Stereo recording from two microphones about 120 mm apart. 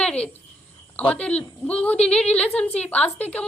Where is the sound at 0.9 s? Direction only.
10° left (ahead or behind).